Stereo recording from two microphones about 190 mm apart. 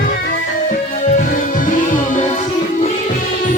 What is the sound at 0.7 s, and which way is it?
Music, 45° left (ahead or behind).